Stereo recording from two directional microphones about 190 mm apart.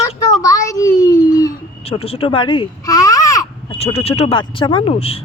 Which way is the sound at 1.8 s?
30° left (ahead or behind).